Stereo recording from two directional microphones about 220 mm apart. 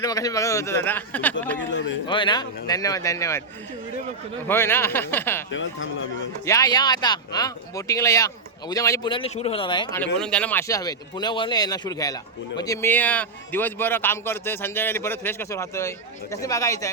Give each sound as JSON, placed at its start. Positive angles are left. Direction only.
{"t": 0.0, "sound": "speech", "side_deg": 15}
{"t": 2.0, "sound": "speech", "side_deg": 20}
{"t": 4.4, "sound": "speech", "side_deg": 10}
{"t": 5.5, "sound": "speech", "side_deg": 60}
{"t": 6.4, "sound": "speech", "side_deg": 15}
{"t": 10.0, "sound": "speech", "side_deg": 5}